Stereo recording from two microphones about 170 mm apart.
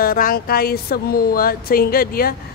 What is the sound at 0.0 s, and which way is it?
Speech, 60° left (ahead or behind).